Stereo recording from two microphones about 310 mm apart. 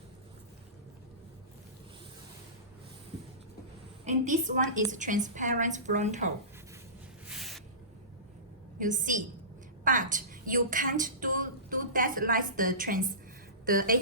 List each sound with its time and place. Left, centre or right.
4.3 s a woman's voice: right
7.3 s a sound: centre
8.8 s a woman's voice: right